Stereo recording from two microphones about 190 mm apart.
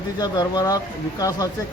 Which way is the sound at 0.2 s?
20° left (ahead or behind).